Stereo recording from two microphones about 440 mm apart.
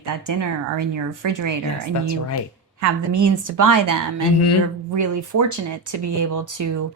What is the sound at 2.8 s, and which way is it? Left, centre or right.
A woman's voice, right.